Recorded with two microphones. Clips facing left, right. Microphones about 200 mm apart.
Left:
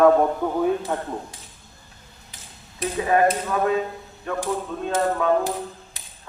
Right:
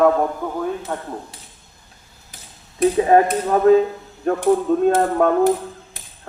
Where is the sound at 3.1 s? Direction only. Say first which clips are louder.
Even; 40° right (ahead or behind).